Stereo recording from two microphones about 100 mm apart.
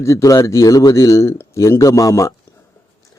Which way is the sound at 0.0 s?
35° left (ahead or behind).